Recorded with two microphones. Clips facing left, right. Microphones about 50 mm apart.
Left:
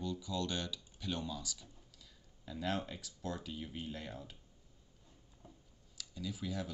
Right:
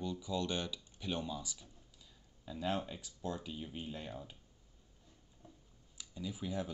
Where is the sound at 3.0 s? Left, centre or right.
Centre.